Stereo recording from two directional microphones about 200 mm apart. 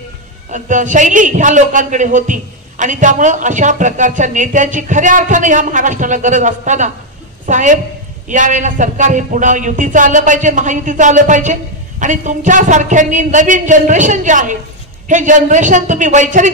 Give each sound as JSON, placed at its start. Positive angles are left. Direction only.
{"t": 0.5, "sound": "a man's voice", "side_deg": -40}